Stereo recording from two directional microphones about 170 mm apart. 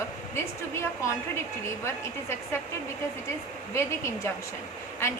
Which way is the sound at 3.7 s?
15° left (ahead or behind).